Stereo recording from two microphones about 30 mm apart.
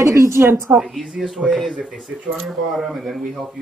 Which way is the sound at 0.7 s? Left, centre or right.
Right.